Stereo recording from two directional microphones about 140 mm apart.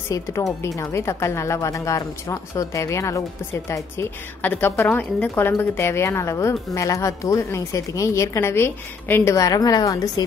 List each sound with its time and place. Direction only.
0.1 s a woman's voice: 20° left (ahead or behind)